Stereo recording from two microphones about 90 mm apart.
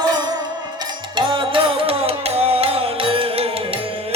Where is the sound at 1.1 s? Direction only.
70° right (ahead or behind); by 3.5 s 90° right.